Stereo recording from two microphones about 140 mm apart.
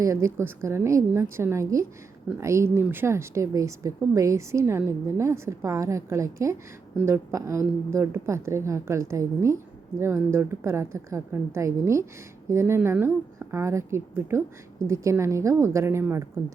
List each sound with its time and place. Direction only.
0.0 s a woman's voice: 20° right (ahead or behind)